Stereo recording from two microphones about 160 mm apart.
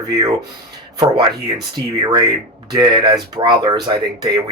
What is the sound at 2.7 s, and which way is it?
Speech, 25° right (ahead or behind).